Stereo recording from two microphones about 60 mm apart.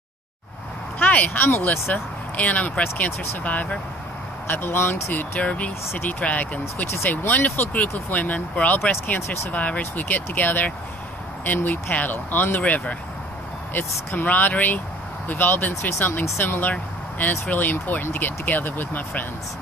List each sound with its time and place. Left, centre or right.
0.9 s speech: left
2.3 s speech: left
4.5 s speech: left
5.1 s speech: left